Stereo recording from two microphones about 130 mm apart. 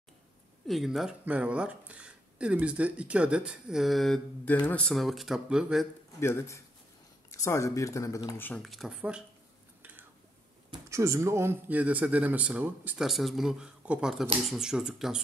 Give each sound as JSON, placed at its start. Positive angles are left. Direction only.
{"t": 0.7, "sound": "speech", "side_deg": 0}
{"t": 6.1, "sound": "speech", "side_deg": 20}
{"t": 8.4, "sound": "speech", "side_deg": 15}
{"t": 8.6, "sound": "speech", "side_deg": 0}
{"t": 9.8, "sound": "whispering", "side_deg": -10}
{"t": 10.9, "sound": "speech", "side_deg": -25}